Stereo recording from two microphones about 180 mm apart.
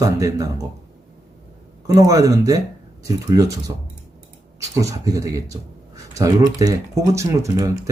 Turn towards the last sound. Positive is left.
turn(degrees=-15)  # may be behind; listen again after turning